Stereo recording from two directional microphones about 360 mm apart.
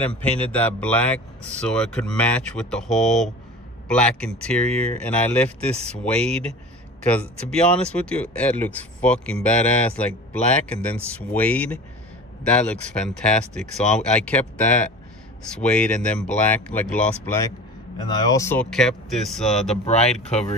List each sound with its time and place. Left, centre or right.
0.0 s speech: centre
19.8 s speech: centre